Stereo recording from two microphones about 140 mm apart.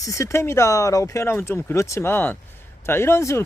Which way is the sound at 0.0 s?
20° left (ahead or behind).